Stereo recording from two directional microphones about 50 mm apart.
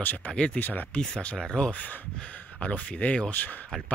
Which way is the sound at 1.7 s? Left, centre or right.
Left.